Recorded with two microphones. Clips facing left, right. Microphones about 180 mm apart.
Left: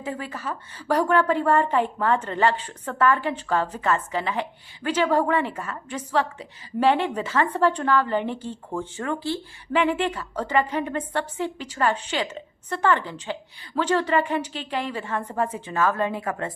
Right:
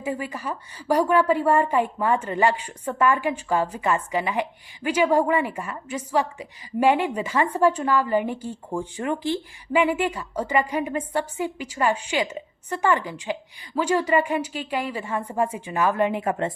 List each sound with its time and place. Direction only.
0.0 s a woman's voice: 10° right (ahead or behind)